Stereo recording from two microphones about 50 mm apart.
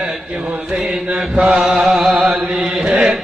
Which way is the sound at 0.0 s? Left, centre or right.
Right.